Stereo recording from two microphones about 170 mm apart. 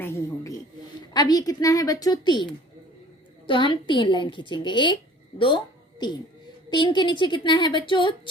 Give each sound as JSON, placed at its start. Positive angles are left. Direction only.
{"t": 0.0, "sound": "snake", "side_deg": 15}
{"t": 1.1, "sound": "a woman's voice", "side_deg": 25}